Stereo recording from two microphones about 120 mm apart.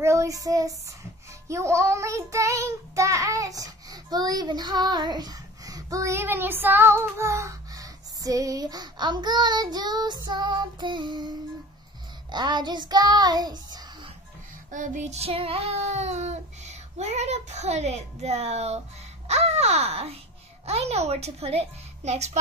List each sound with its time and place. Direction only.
0.0 s child singing: 25° right (ahead or behind)
14.7 s child singing: 90° right; by 18.8 s 60° right (ahead or behind)
19.2 s a child's voice: 65° right (ahead or behind)
20.6 s child singing: 60° right (ahead or behind)